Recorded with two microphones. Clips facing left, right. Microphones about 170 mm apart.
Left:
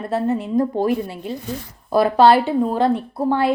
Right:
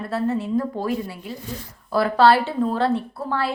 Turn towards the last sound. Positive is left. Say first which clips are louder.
# left 7 dB
turn(degrees=20)  # may be behind; listen again after turning